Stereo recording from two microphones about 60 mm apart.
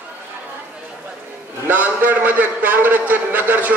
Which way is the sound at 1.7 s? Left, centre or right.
Right.